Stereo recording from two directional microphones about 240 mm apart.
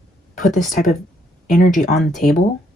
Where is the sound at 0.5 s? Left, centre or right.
Left.